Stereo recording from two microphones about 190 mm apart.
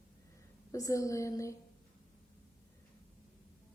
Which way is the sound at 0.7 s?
15° left (ahead or behind).